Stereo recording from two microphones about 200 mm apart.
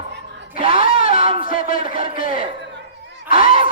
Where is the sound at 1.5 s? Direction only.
45° left (ahead or behind).